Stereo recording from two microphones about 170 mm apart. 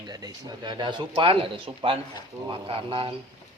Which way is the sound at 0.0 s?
25° right (ahead or behind).